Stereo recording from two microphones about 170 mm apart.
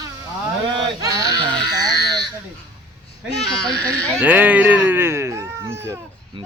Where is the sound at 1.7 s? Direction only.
25° right (ahead or behind).